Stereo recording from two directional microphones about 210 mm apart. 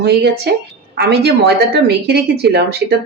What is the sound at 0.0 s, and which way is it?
Speech, 50° right (ahead or behind).